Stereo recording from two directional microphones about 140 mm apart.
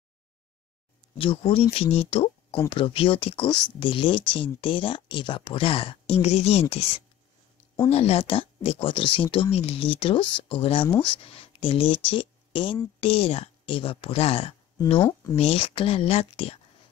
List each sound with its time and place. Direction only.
1.1 s speech: 40° left (ahead or behind)
7.9 s speech: 45° left (ahead or behind)